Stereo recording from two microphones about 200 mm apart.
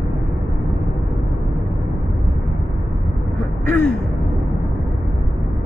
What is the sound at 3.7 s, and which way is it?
Gasp, 10° left (ahead or behind).